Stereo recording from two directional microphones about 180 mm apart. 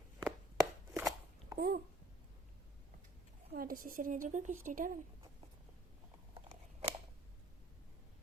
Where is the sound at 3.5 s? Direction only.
50° right (ahead or behind).